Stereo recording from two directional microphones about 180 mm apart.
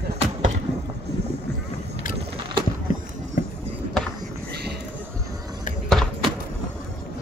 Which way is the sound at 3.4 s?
50° left (ahead or behind).